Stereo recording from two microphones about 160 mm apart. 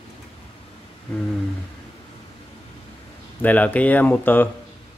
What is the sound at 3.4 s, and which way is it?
Speech, 10° left (ahead or behind).